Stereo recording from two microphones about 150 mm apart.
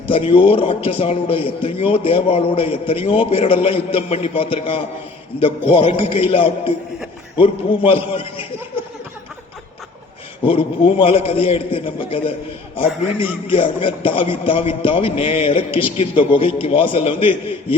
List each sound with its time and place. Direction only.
0.1 s a man's voice: 40° left (ahead or behind)
10.4 s a man's voice: 35° left (ahead or behind)